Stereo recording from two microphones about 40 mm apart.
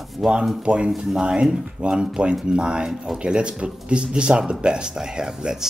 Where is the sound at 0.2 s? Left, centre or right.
Centre.